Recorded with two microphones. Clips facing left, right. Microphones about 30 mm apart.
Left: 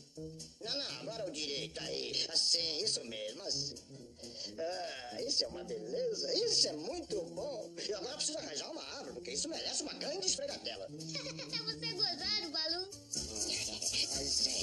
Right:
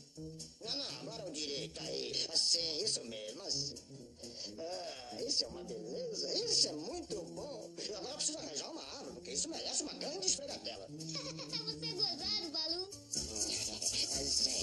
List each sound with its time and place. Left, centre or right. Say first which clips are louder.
0.7 s speech: left 2 dB; left
11.5 s speech: left 1 dB; left